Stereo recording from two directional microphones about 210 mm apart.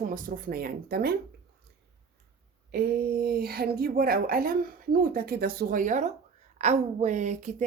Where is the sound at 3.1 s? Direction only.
45° right (ahead or behind).